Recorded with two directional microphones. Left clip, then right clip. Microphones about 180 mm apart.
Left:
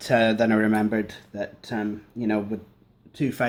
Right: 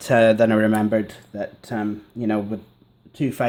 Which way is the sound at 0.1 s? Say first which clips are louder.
Right 5 dB; 50° right (ahead or behind).